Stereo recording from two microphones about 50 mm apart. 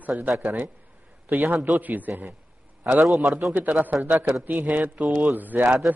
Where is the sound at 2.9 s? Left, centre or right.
Centre.